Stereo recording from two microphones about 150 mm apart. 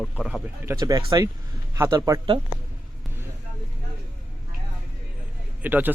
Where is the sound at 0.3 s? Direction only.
10° right (ahead or behind).